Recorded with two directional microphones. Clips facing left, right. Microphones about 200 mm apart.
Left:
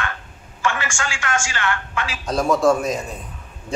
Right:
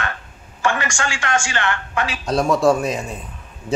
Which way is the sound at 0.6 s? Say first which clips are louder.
Right 3 dB; 35° right (ahead or behind).